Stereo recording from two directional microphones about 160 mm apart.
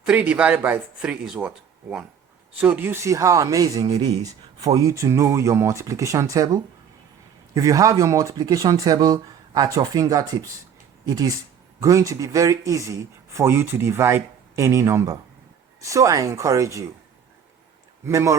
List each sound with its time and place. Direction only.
0.0 s speech: 5° right (ahead or behind)
18.0 s speech: 20° right (ahead or behind)